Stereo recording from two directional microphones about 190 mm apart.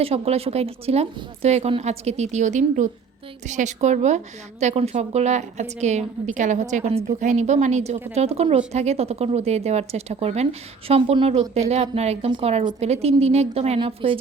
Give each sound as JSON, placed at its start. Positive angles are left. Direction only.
{"t": 0.0, "sound": "speech", "side_deg": -30}